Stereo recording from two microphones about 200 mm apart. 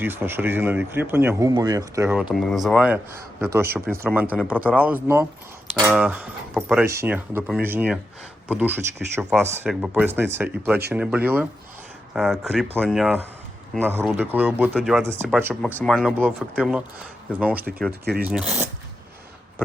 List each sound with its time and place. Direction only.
0.0 s a man's voice: 10° right (ahead or behind)
2.1 s a man's voice: centre (ahead or behind)
14.7 s speech: centre (ahead or behind)
15.3 s a man's voice: 10° right (ahead or behind)
15.6 s a man's voice: 5° left (ahead or behind)
17.6 s speech: 50° right (ahead or behind)
18.3 s speech: 5° right (ahead or behind)